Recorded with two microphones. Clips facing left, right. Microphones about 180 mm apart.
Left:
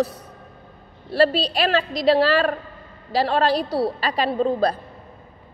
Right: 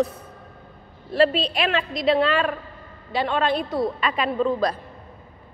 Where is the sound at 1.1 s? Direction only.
35° left (ahead or behind).